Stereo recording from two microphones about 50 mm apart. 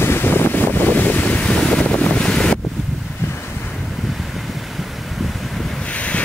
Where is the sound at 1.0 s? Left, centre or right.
Left.